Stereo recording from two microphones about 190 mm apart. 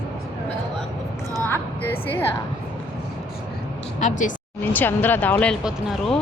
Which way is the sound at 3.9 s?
40° left (ahead or behind).